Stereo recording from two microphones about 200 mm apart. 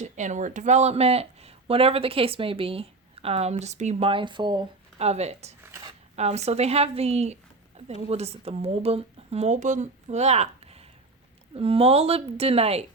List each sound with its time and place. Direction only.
0.0 s speech: 35° right (ahead or behind)
5.6 s a sound: 15° right (ahead or behind)
6.1 s speech: 35° right (ahead or behind)